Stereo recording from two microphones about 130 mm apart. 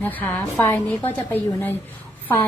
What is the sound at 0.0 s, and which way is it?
A woman's voice, 15° left (ahead or behind).